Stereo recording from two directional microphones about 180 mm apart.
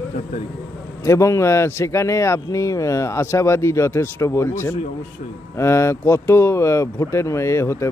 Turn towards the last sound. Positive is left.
turn(degrees=15)  # may be behind; listen again after turning